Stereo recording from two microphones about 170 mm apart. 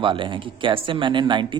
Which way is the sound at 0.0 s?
30° right (ahead or behind).